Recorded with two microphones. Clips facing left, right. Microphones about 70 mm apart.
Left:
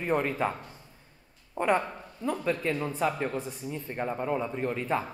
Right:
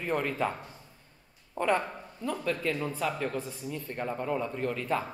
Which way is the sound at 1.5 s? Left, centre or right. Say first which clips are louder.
Left 2 dB; centre.